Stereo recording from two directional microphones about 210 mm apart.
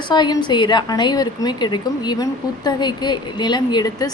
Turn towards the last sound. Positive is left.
turn(degrees=20)  # may be behind; listen again after turning